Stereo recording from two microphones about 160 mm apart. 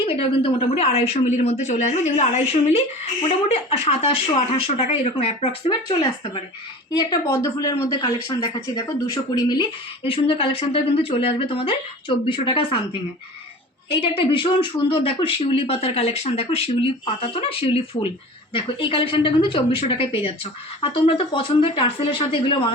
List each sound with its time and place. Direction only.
0.0 s a woman's voice: 35° left (ahead or behind)
13.9 s speech: 35° left (ahead or behind)